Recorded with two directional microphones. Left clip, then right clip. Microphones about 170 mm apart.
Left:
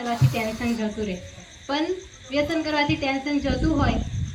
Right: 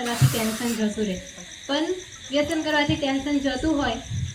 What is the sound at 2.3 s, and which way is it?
Speech, 20° left (ahead or behind).